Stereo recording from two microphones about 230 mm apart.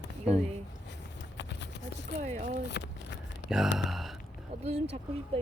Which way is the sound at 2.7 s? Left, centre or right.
Left.